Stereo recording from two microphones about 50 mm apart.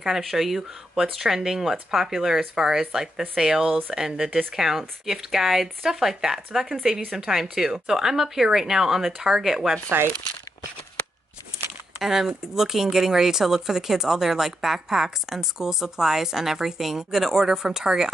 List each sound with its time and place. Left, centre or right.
0.0 s speech: centre
9.8 s speech: right
12.0 s speech: centre